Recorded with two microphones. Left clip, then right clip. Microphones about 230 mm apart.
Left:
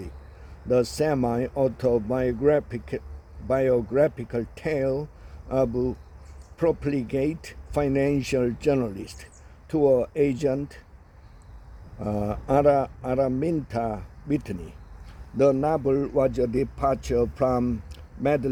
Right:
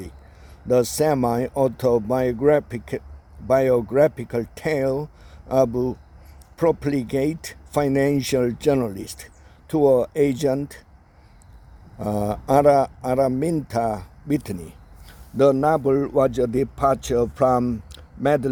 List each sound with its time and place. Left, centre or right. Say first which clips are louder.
0.7 s a man's voice: right 4 dB; right
11.9 s a man's voice: right 4 dB; right